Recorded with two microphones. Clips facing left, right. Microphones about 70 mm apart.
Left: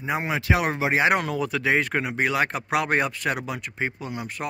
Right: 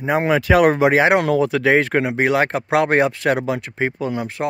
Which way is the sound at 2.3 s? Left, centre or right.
Right.